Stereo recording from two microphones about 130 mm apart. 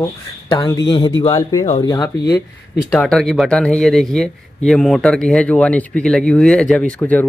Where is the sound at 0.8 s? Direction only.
40° left (ahead or behind).